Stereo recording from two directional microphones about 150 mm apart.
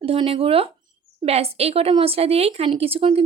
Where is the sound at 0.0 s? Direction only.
40° right (ahead or behind).